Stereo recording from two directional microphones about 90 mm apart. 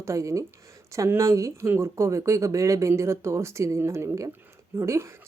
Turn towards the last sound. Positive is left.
turn(degrees=-30)  # may be behind; listen again after turning